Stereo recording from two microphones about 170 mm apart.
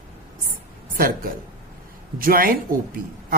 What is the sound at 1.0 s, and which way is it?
A woman's voice, 55° right (ahead or behind).